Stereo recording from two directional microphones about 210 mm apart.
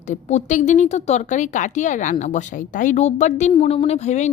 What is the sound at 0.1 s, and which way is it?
A woman's voice, 35° left (ahead or behind).